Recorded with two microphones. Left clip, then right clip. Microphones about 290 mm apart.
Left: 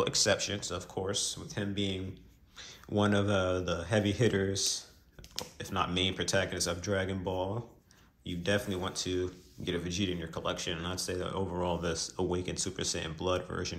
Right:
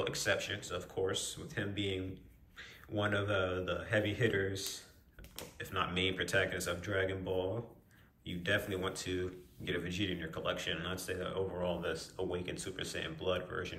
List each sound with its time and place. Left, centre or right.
0.0 s speech: centre